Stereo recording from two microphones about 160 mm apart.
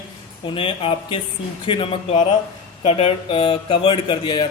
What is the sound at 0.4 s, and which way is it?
A man's voice, 35° left (ahead or behind).